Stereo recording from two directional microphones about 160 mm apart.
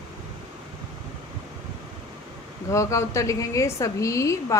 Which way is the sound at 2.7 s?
20° left (ahead or behind).